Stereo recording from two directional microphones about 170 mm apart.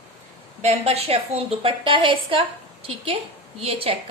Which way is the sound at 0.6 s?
35° right (ahead or behind).